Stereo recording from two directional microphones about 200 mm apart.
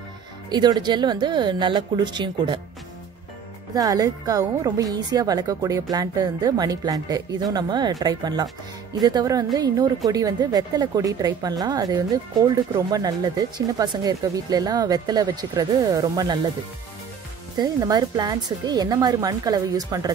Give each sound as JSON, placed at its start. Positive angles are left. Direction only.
{"t": 0.5, "sound": "a woman's voice", "side_deg": -20}
{"t": 3.7, "sound": "a woman's voice", "side_deg": -20}
{"t": 17.6, "sound": "a woman's voice", "side_deg": -20}